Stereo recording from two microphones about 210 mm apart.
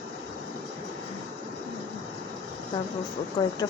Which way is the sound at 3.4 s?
20° left (ahead or behind).